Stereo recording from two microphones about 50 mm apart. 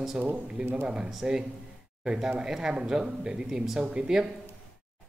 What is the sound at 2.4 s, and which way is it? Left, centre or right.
Speech, centre.